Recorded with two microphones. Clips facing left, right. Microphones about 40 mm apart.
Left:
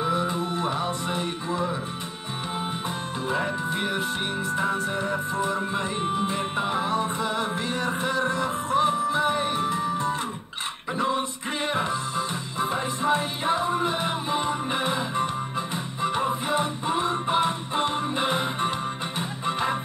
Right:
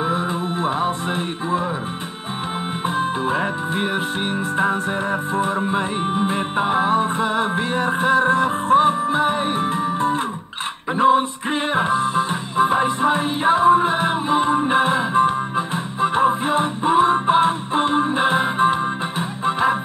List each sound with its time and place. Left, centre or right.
0.0 s music: right
3.0 s music: right; by 19.8 s centre